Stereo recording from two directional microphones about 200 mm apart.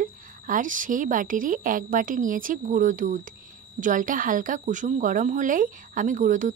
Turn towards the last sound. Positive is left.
turn(degrees=-40)  # may be behind; listen again after turning